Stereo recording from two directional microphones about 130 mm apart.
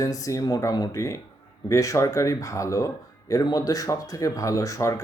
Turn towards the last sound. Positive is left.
turn(degrees=25)  # may be behind; listen again after turning